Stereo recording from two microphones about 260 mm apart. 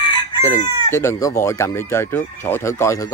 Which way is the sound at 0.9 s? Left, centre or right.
Centre.